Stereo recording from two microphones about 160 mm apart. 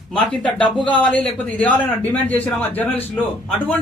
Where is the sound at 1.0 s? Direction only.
5° left (ahead or behind).